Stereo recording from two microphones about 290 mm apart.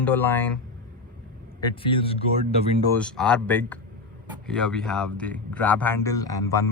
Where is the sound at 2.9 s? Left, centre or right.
Centre.